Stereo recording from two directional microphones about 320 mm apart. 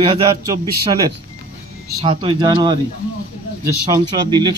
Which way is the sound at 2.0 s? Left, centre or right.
Centre.